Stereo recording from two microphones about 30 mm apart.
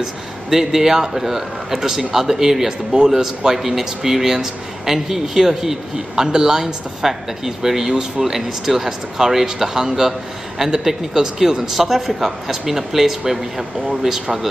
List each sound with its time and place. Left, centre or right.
0.0 s speech: centre